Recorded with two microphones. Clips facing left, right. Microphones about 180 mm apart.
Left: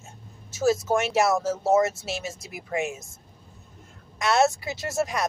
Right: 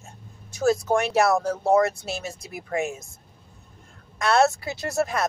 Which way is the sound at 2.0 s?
Centre (ahead or behind).